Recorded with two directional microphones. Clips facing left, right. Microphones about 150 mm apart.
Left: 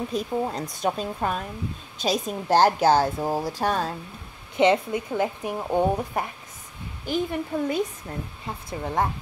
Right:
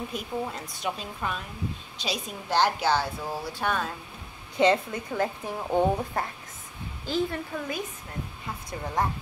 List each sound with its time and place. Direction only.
0.1 s a woman's voice: 40° left (ahead or behind)
4.6 s speech: 20° left (ahead or behind)
8.6 s speech: 25° left (ahead or behind)